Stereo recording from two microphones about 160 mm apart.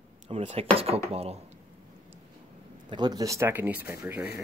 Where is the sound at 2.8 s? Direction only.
25° right (ahead or behind).